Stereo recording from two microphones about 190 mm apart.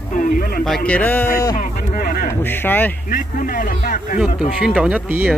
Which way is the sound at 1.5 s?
50° left (ahead or behind).